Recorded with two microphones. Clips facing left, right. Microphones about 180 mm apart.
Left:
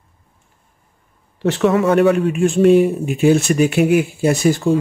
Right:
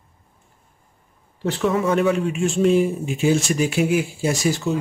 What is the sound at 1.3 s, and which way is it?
A man's voice, 80° left.